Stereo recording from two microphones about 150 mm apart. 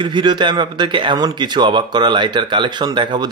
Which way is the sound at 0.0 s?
30° right (ahead or behind).